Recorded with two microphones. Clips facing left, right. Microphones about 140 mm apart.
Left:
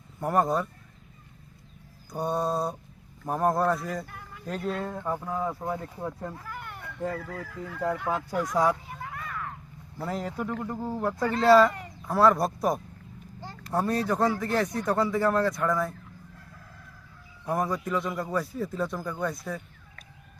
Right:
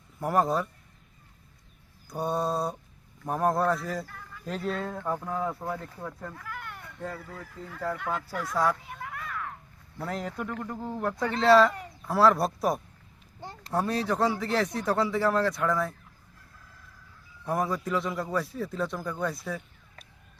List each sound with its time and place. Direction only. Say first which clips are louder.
0.2 s speech: left 1 dB; centre (ahead or behind)
2.0 s speech: left 1 dB; centre (ahead or behind)
5.6 s speech: left 3 dB; 15° left (ahead or behind)
6.6 s a sound: left 7 dB; 10° left (ahead or behind)
7.2 s fowl: left 5 dB; 90° left
7.7 s speech: left 3 dB; 15° left (ahead or behind)
9.0 s a sound: even; centre (ahead or behind)
10.0 s speech: left 2 dB; centre (ahead or behind)
17.4 s speech: even; centre (ahead or behind)